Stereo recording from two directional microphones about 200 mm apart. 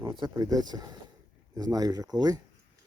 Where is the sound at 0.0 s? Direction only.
20° right (ahead or behind).